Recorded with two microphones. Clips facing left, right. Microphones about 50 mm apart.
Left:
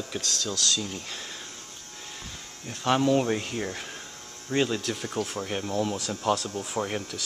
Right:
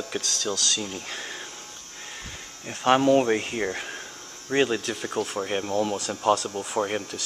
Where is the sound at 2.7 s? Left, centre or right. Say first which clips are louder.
Right 4 dB; right; by 5.4 s centre.